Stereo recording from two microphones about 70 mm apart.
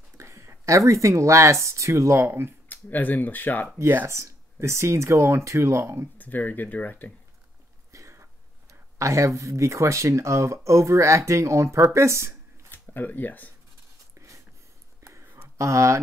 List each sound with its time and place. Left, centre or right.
0.2 s speech: right
2.7 s speech: left
3.9 s speech: right
6.1 s speech: left
7.9 s speech: right
12.7 s speech: left
14.1 s a sound: right